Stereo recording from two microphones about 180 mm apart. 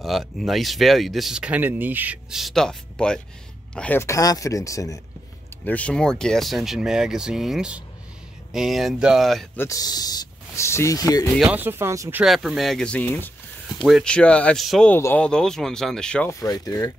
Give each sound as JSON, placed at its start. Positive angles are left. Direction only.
{"t": 0.0, "sound": "speech", "side_deg": 0}
{"t": 5.7, "sound": "speech", "side_deg": 5}
{"t": 9.6, "sound": "speech", "side_deg": 20}
{"t": 11.3, "sound": "speech", "side_deg": -5}
{"t": 12.2, "sound": "speech", "side_deg": 0}
{"t": 16.3, "sound": "speech", "side_deg": 20}